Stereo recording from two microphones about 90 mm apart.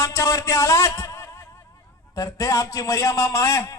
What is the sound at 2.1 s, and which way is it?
A man's voice, 40° left (ahead or behind).